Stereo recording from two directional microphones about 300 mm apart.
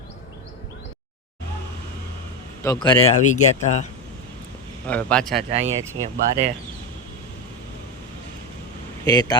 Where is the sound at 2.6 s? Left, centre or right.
Centre.